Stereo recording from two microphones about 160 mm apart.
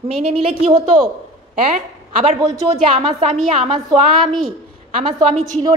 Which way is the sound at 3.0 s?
35° right (ahead or behind).